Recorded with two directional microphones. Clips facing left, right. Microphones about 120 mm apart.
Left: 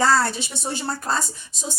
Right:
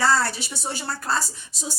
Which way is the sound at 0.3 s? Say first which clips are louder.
Left 2 dB; 25° left (ahead or behind).